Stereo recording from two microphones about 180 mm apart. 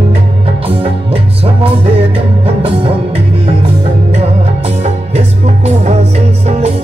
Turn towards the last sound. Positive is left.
turn(degrees=-35)  # may be behind; listen again after turning